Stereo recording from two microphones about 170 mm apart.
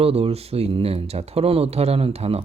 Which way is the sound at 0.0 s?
35° right (ahead or behind).